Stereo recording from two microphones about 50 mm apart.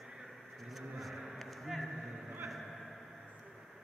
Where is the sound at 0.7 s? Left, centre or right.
Centre.